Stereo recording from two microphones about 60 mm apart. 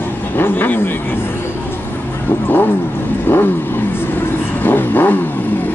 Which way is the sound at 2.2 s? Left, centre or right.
Left.